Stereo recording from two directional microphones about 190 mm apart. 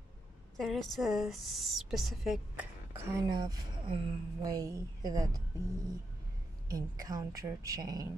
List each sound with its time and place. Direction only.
0.6 s a woman's voice: centre (ahead or behind); by 5.4 s 20° right (ahead or behind)
6.7 s speech: 20° right (ahead or behind)